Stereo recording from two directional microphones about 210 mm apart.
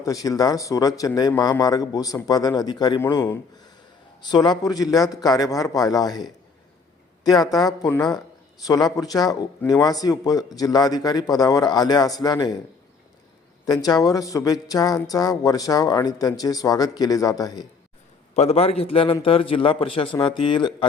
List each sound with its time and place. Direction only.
0.0 s a man's voice: 15° left (ahead or behind)
7.3 s a man's voice: 20° left (ahead or behind)
13.7 s a man's voice: 15° left (ahead or behind)
18.3 s speech: 30° left (ahead or behind)